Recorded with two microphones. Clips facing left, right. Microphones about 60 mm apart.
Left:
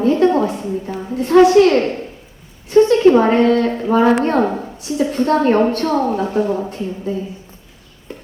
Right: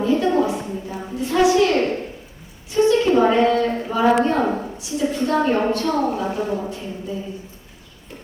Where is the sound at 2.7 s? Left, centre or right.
Left.